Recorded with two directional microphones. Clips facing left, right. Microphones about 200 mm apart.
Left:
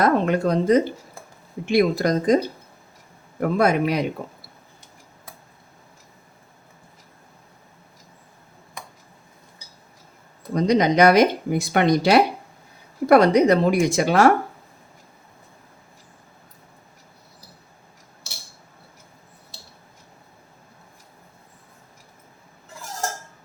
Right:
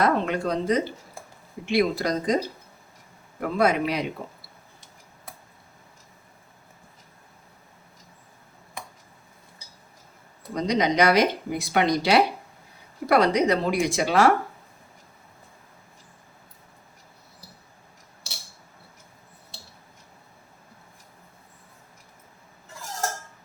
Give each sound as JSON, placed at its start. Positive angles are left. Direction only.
{"t": 0.0, "sound": "speech", "side_deg": 45}
{"t": 3.4, "sound": "speech", "side_deg": 45}
{"t": 10.5, "sound": "speech", "side_deg": 50}